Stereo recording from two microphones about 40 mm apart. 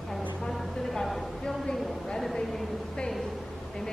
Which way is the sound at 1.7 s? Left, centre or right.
Centre.